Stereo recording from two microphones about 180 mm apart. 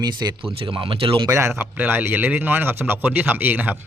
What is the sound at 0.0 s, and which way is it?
Speech, 25° right (ahead or behind).